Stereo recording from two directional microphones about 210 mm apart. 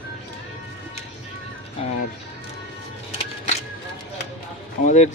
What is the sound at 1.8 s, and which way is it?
Music, 30° left (ahead or behind).